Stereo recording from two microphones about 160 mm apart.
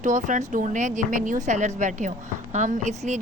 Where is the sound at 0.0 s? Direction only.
50° right (ahead or behind).